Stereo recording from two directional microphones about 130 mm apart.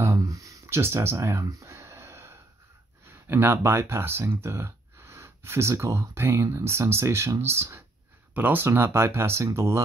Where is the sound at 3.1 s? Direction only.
20° right (ahead or behind).